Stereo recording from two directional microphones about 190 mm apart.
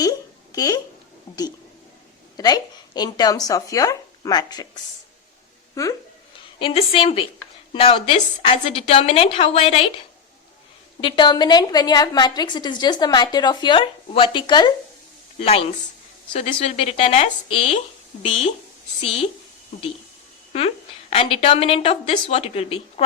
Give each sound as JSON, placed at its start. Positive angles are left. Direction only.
{"t": 0.0, "sound": "a sound", "side_deg": 20}
{"t": 2.3, "sound": "a woman's voice", "side_deg": 20}
{"t": 6.6, "sound": "a woman's voice", "side_deg": 30}
{"t": 11.0, "sound": "a woman's voice", "side_deg": 25}
{"t": 20.5, "sound": "a woman's voice", "side_deg": 35}